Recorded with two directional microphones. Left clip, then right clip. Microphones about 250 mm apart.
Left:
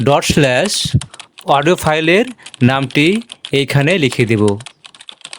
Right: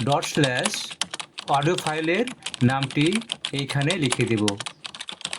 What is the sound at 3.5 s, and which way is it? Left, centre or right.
Speech, left.